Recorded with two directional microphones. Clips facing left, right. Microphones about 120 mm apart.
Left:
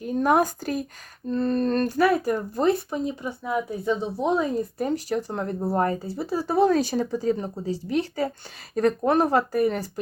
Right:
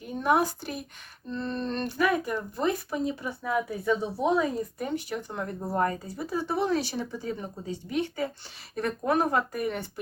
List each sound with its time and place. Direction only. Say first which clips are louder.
0.2 s speech: left 3 dB; 45° left (ahead or behind)
2.7 s a woman's voice: left 2 dB; 25° left (ahead or behind)